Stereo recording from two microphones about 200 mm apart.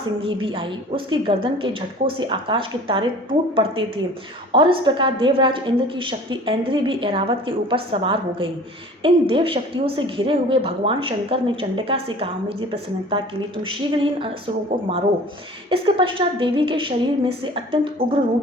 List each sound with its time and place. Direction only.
0.2 s a woman's voice: 25° right (ahead or behind)
15.7 s a woman's voice: 25° right (ahead or behind)